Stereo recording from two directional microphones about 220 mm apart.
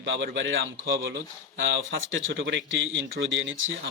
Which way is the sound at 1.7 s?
55° right (ahead or behind).